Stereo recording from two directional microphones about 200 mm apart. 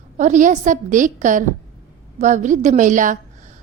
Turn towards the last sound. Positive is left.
turn(degrees=-40)  # may be behind; listen again after turning